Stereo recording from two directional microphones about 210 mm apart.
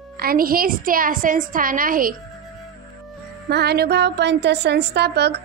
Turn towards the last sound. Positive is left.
turn(degrees=-50)  # may be behind; listen again after turning